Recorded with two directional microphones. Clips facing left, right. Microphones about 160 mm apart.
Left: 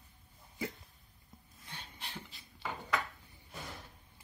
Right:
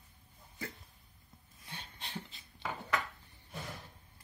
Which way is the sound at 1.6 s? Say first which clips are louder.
Even; 20° right (ahead or behind).